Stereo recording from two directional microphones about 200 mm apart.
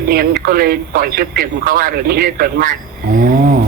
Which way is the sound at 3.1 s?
40° right (ahead or behind).